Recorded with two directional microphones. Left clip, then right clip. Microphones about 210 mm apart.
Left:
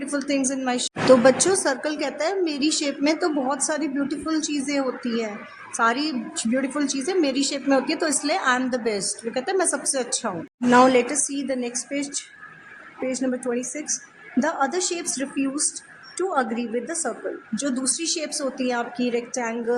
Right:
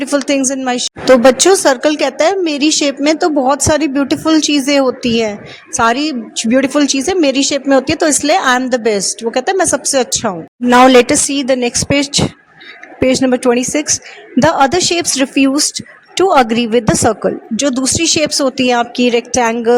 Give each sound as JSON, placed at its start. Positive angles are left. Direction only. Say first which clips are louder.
{"t": 0.0, "sound": "a woman's voice", "louder": "right 11 dB", "side_deg": -35}